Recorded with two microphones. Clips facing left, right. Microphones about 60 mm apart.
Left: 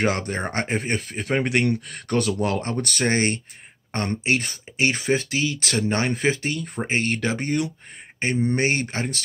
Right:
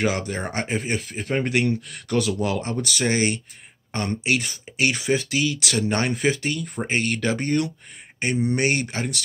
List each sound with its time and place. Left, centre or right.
0.0 s speech: left